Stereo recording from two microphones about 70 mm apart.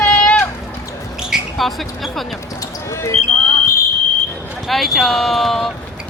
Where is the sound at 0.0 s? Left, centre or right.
Centre.